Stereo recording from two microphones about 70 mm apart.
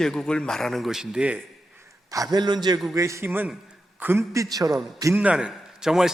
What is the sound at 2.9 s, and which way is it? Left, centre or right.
Speech, right.